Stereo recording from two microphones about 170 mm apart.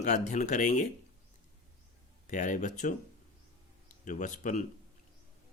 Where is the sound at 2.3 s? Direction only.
50° left (ahead or behind).